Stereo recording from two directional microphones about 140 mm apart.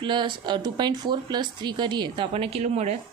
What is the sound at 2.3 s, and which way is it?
Speech, 45° right (ahead or behind).